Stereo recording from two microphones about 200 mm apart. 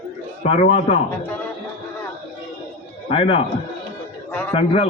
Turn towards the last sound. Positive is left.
turn(degrees=30)  # may be behind; listen again after turning